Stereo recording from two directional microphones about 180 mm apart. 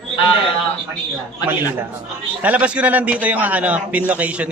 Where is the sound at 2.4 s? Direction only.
10° right (ahead or behind).